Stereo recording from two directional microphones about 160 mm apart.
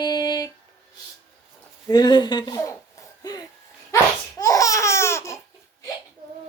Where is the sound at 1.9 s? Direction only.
25° left (ahead or behind).